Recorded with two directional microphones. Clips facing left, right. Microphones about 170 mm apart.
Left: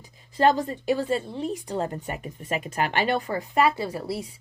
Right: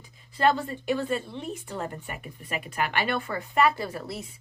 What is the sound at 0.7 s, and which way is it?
Speech, 35° left (ahead or behind).